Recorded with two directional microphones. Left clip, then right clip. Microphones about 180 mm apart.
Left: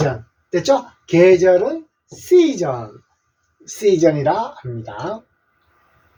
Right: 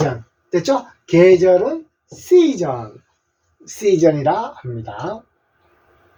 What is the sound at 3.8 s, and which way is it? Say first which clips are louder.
Speech: even; 5° right (ahead or behind).